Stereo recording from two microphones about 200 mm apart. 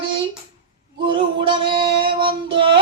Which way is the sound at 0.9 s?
25° right (ahead or behind).